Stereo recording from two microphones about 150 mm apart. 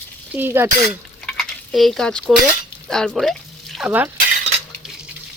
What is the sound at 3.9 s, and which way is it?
Speech, 10° right (ahead or behind).